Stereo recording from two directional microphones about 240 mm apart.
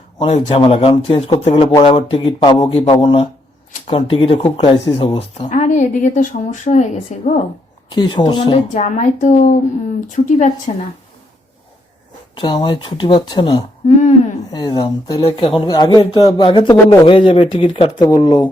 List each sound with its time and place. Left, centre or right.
0.2 s speech: left
7.9 s speech: centre
12.3 s speech: centre